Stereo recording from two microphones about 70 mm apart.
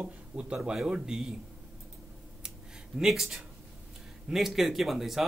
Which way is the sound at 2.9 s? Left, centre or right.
Centre.